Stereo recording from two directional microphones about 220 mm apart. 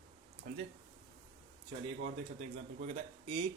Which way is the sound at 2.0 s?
30° right (ahead or behind).